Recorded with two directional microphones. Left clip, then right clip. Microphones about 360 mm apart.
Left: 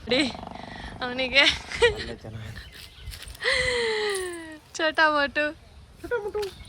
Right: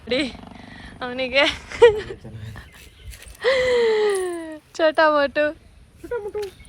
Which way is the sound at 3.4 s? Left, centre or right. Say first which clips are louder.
Right 6 dB; centre.